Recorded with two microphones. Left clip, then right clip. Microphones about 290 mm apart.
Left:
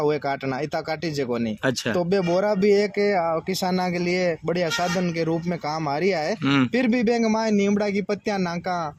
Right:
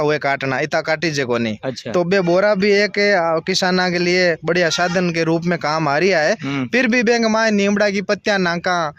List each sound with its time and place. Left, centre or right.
0.0 s speech: right
3.2 s a man's voice: right
3.5 s a man's voice: right